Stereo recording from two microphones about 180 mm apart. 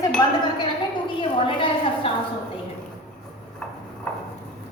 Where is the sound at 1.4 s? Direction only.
30° left (ahead or behind).